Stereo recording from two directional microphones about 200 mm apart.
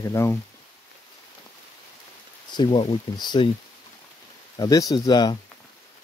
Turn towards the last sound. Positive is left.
turn(degrees=20)  # may be behind; listen again after turning